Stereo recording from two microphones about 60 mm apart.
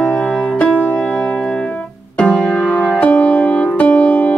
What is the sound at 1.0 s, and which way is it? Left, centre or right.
Music, centre.